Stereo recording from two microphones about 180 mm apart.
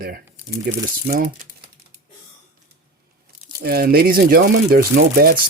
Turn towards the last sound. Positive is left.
turn(degrees=-55)  # may be behind; listen again after turning